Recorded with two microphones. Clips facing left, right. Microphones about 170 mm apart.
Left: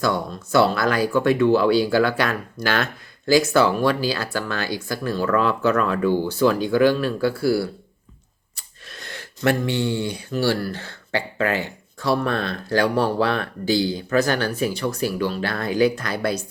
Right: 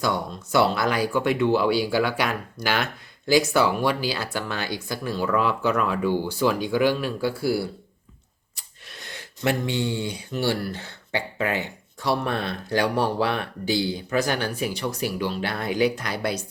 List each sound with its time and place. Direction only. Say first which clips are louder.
0.0 s speech: left 3 dB; 15° right (ahead or behind)